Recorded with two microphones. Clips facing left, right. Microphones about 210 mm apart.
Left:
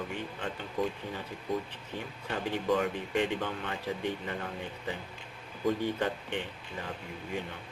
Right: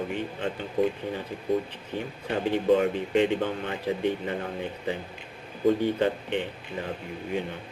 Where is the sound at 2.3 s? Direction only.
25° right (ahead or behind).